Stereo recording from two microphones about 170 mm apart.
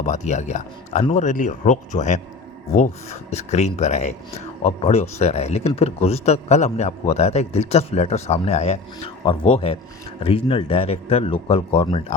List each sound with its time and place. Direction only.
0.0 s speech: 45° left (ahead or behind)